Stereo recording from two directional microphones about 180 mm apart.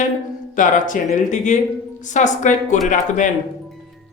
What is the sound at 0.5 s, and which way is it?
Speech, 45° left (ahead or behind).